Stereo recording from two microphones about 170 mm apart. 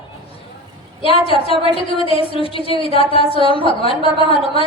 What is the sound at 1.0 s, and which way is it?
A woman's voice, 35° left (ahead or behind).